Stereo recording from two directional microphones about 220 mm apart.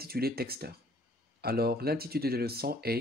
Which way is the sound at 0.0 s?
45° right (ahead or behind).